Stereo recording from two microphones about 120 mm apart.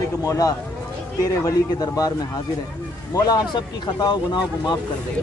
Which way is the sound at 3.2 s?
35° left (ahead or behind).